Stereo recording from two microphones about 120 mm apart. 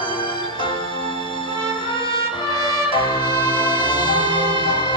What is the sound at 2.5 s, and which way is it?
Music, 40° left (ahead or behind).